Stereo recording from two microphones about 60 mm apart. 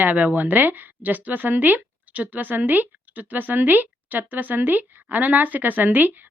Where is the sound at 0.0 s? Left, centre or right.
Right.